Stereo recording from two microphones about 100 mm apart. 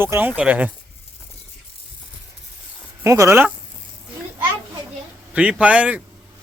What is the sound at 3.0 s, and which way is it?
Speech, 30° right (ahead or behind).